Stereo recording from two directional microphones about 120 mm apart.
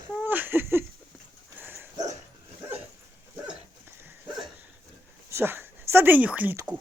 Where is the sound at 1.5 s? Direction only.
15° right (ahead or behind).